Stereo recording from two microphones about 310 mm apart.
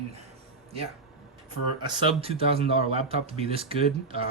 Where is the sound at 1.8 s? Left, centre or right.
Centre.